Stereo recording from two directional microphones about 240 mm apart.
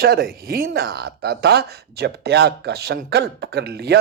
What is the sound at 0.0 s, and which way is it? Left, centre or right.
Speech, right.